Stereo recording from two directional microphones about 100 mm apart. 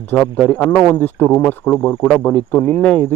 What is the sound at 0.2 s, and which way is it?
Speech, 10° left (ahead or behind).